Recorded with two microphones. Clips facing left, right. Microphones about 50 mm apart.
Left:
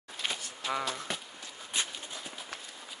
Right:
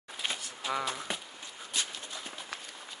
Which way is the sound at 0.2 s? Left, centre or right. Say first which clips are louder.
Even; centre.